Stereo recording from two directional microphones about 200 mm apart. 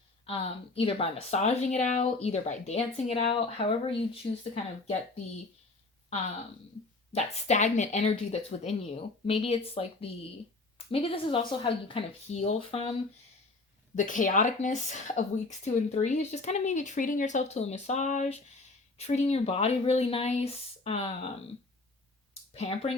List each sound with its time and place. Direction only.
0.3 s speech: 30° left (ahead or behind)
7.1 s speech: 35° left (ahead or behind)
13.9 s speech: 40° left (ahead or behind)
22.5 s speech: 30° left (ahead or behind)